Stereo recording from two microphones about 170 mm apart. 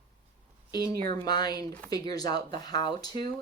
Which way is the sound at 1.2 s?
25° left (ahead or behind).